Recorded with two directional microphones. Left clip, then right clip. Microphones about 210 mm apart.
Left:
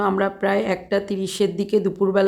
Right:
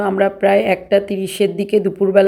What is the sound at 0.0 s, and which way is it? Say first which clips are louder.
A woman's voice: right 6 dB; 5° right (ahead or behind).